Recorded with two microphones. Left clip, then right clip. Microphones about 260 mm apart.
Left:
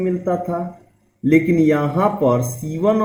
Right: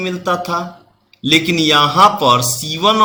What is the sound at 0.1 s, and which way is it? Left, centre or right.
Speech, right.